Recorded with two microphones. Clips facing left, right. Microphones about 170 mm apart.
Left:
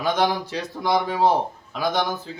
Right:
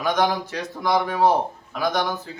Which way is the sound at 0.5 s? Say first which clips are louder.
Even; 25° left (ahead or behind).